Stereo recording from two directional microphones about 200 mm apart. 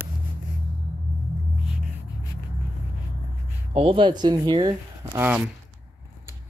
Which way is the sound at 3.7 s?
30° right (ahead or behind).